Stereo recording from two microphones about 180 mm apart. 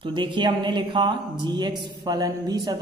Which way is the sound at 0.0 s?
25° right (ahead or behind).